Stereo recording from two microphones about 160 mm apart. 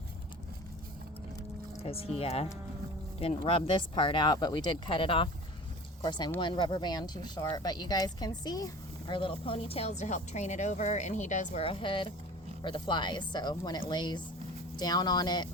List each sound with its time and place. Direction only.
1.8 s a woman's voice: 40° left (ahead or behind)
11.6 s a woman's voice: 35° left (ahead or behind)